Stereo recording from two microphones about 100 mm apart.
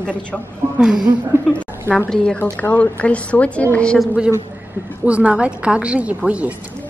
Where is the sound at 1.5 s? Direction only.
15° left (ahead or behind).